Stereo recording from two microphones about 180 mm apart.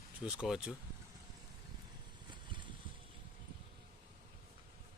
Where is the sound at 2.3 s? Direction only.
25° right (ahead or behind).